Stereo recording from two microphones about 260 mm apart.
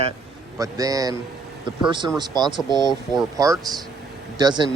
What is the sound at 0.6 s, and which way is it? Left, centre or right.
A man's voice, centre.